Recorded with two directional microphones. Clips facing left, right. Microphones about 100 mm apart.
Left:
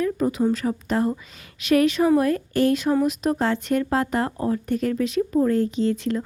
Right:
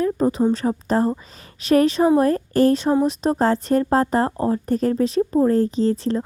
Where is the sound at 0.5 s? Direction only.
35° right (ahead or behind).